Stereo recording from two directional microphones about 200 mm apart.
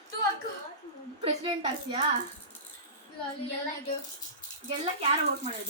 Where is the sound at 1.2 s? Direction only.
25° right (ahead or behind).